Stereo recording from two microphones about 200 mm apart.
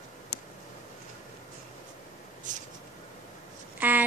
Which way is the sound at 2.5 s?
40° right (ahead or behind).